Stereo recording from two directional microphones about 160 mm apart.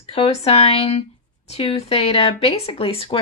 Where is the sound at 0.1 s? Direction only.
40° left (ahead or behind).